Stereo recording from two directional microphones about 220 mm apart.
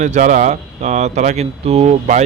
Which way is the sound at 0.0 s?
35° right (ahead or behind).